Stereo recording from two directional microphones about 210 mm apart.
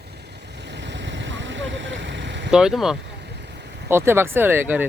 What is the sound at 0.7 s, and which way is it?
Vehicle, 55° right (ahead or behind).